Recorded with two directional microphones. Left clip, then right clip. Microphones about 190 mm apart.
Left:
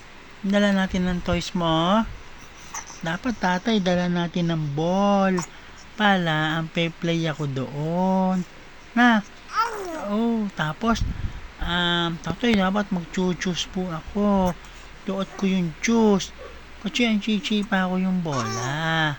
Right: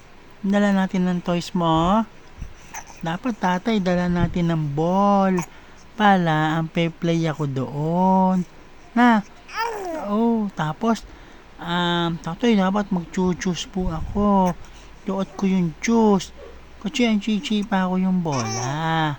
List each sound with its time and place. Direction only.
0.4 s speech: 30° right (ahead or behind)
9.6 s babbling: 30° right (ahead or behind)
11.6 s speech: 30° right (ahead or behind)